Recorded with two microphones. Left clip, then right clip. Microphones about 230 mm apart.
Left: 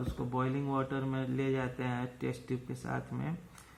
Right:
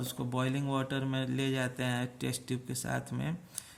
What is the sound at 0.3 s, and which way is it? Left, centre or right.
Speech, right.